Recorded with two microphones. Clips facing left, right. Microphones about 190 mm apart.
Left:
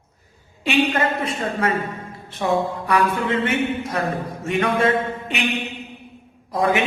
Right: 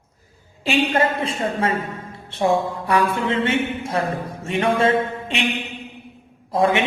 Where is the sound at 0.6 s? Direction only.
30° right (ahead or behind).